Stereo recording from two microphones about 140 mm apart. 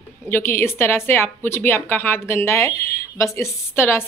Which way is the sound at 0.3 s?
15° left (ahead or behind).